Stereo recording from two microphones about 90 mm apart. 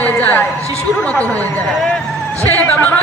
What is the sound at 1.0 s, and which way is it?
A woman's voice, 10° left (ahead or behind).